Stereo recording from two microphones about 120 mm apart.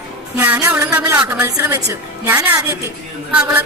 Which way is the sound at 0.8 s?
25° right (ahead or behind).